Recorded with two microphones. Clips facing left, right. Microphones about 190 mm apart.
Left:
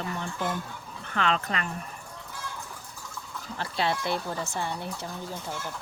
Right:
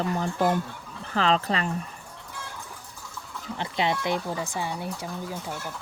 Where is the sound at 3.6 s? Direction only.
20° right (ahead or behind).